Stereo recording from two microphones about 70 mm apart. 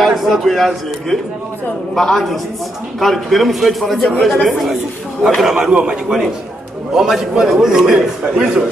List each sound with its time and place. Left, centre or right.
0.0 s a man's voice: centre
2.0 s a man's voice: centre